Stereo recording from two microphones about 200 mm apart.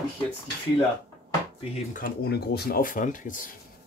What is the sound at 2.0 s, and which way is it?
Speech, 50° left (ahead or behind).